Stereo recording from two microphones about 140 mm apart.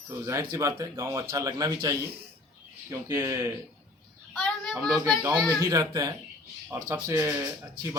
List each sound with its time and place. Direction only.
0.1 s speech: 20° right (ahead or behind)
4.4 s speech: centre (ahead or behind)
5.5 s speech: 20° right (ahead or behind)